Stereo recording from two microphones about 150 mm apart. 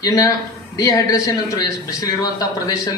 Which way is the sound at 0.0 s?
25° left (ahead or behind).